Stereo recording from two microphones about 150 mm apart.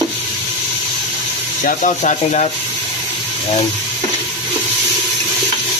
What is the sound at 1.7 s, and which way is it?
Speech, 55° left (ahead or behind).